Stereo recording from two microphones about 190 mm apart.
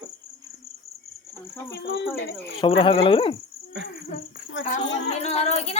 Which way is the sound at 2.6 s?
30° left (ahead or behind).